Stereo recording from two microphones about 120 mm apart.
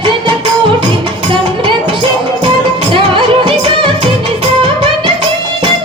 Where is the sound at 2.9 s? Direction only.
45° right (ahead or behind).